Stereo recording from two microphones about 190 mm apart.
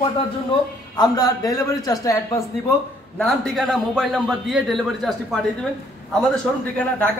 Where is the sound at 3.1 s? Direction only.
Centre (ahead or behind).